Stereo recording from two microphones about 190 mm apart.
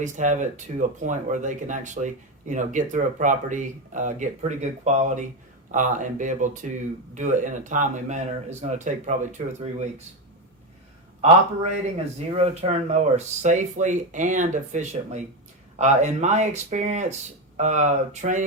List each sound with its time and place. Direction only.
0.0 s speech: 40° right (ahead or behind)
12.3 s speech: 35° right (ahead or behind)